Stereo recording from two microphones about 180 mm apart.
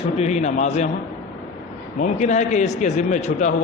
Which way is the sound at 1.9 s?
40° left (ahead or behind).